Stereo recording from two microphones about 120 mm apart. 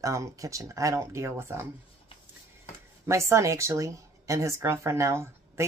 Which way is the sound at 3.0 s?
25° right (ahead or behind).